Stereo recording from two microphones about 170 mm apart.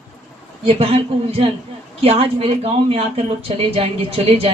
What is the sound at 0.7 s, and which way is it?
Speech, 35° right (ahead or behind).